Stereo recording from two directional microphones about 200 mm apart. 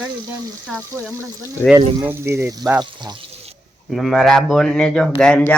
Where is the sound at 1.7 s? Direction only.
10° right (ahead or behind).